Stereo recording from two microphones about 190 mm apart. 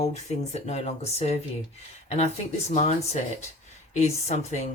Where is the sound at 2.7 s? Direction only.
35° left (ahead or behind).